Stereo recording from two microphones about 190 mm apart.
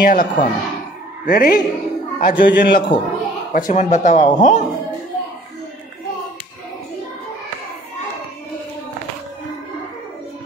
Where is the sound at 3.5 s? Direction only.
45° left (ahead or behind).